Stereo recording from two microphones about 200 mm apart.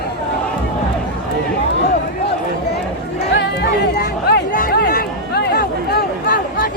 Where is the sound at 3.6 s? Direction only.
55° left (ahead or behind).